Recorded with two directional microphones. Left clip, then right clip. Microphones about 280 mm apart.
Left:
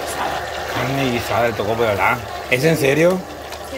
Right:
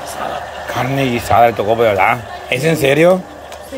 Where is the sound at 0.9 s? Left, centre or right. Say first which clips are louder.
Right 9 dB; centre.